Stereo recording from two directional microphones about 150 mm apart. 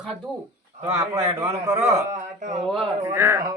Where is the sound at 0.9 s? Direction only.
20° right (ahead or behind).